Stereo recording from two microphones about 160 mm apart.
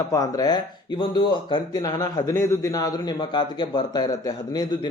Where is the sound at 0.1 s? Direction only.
20° left (ahead or behind).